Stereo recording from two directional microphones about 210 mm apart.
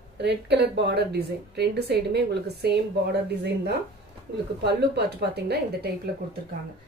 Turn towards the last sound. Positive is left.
turn(degrees=-50)  # may be behind; listen again after turning